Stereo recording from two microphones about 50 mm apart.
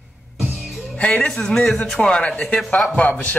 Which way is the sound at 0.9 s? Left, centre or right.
Left.